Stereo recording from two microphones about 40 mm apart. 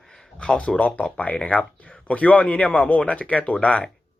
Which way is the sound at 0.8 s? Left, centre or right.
Left.